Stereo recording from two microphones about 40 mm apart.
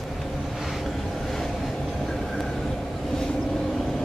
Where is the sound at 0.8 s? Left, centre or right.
Centre.